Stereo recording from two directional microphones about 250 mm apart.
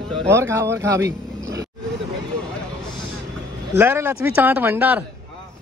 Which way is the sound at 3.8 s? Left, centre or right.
Centre.